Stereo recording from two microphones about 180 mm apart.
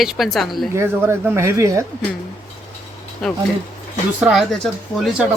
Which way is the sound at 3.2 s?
5° left (ahead or behind).